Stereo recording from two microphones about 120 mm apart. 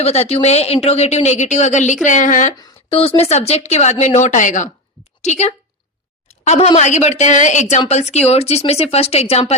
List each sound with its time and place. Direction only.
0.0 s a woman's voice: 60° left (ahead or behind); by 2.5 s 90° left
2.9 s speech: 50° left (ahead or behind); by 4.7 s 90° left
5.2 s speech: 70° left (ahead or behind)
7.9 s speech: 65° left (ahead or behind)